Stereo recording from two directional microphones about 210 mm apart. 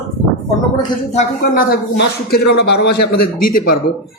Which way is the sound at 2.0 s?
50° left (ahead or behind).